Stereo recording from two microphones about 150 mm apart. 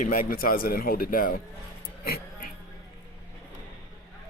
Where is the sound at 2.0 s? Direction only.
90° left.